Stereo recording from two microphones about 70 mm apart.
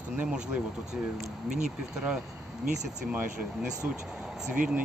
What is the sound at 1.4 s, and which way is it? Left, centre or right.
Speech, centre.